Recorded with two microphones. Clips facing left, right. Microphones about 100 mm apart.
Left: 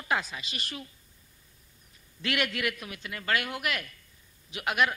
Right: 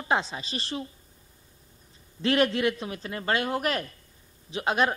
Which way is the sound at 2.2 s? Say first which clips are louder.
Right 7 dB; 30° right (ahead or behind).